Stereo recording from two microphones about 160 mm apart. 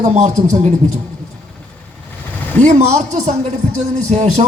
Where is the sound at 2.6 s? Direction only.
45° right (ahead or behind).